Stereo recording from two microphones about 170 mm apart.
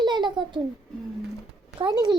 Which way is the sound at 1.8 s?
25° right (ahead or behind).